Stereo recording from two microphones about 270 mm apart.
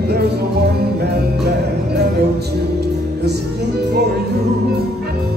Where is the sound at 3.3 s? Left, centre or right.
Right.